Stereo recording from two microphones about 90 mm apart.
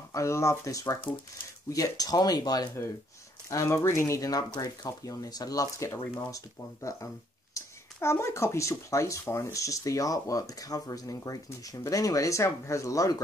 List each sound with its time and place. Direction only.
0.1 s speech: 35° left (ahead or behind)
3.4 s speech: 30° left (ahead or behind)
4.2 s speech: 40° left (ahead or behind)